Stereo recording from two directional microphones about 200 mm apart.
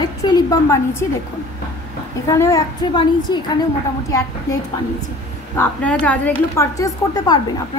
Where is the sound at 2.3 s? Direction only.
15° left (ahead or behind).